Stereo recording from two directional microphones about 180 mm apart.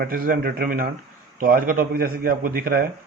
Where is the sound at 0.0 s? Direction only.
55° right (ahead or behind).